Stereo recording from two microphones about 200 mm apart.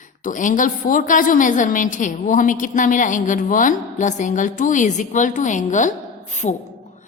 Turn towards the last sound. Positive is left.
turn(degrees=35)  # may be behind; listen again after turning